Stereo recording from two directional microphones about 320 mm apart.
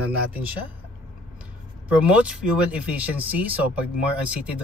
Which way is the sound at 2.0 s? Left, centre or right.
Centre.